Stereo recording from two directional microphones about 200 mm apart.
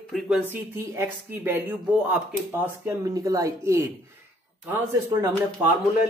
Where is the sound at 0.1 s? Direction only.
5° right (ahead or behind).